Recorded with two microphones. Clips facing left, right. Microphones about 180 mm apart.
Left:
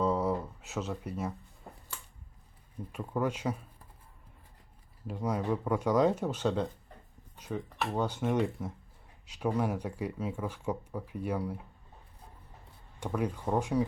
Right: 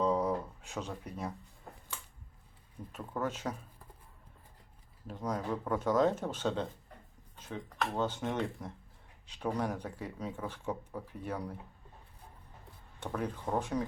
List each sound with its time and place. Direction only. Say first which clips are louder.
0.0 s a sound: left 1 dB; 5° left (ahead or behind)
2.9 s speech: left 4 dB; 10° left (ahead or behind)
5.0 s speech: left 4 dB; 10° left (ahead or behind)
13.0 s speech: left 4 dB; 10° left (ahead or behind)